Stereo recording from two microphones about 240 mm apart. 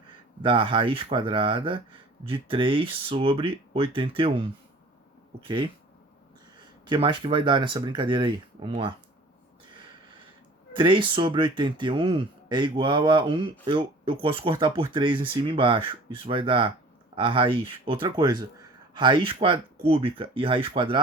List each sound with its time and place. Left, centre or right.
0.4 s speech: right
6.8 s speech: centre
10.8 s speech: centre